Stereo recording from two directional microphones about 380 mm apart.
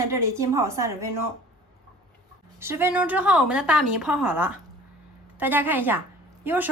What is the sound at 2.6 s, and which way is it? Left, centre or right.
A woman's voice, centre.